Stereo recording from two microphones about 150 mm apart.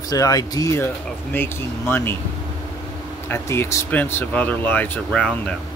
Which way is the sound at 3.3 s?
15° left (ahead or behind).